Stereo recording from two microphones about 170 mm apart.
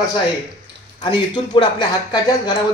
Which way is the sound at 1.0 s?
30° left (ahead or behind).